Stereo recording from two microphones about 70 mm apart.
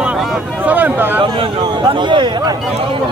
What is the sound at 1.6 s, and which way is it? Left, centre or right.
Speech, right.